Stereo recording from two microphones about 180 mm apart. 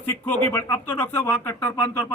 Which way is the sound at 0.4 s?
10° left (ahead or behind).